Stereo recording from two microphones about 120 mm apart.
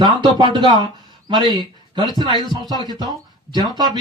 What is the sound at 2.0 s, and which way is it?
Speech, 35° left (ahead or behind).